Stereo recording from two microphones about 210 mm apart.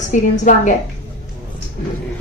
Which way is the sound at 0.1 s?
35° left (ahead or behind).